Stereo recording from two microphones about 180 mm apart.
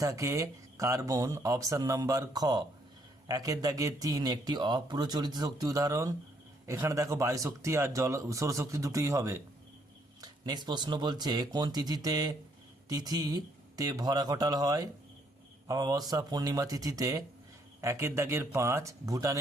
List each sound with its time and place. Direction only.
0.0 s speech: 15° right (ahead or behind)